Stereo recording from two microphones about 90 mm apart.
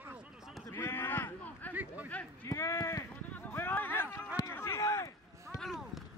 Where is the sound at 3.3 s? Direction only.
20° left (ahead or behind).